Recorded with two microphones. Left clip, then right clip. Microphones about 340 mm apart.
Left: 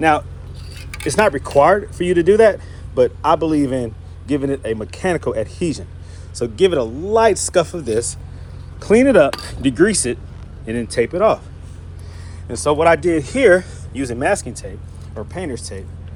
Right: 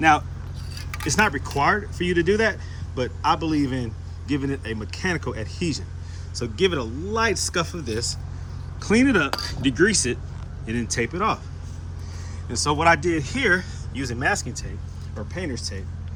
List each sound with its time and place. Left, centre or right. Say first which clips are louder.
1.0 s speech: left 6 dB; centre
12.6 s speech: left 5 dB; centre